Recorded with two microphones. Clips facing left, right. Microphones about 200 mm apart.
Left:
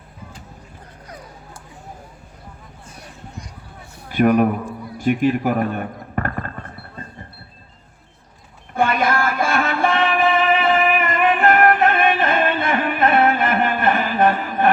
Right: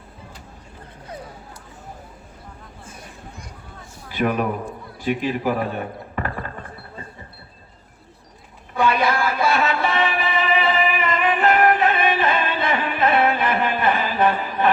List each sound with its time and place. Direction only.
4.1 s a man's voice: 50° left (ahead or behind)
8.7 s music: 50° left (ahead or behind)